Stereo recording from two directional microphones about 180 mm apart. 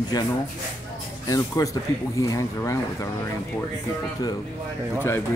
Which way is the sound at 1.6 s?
20° left (ahead or behind).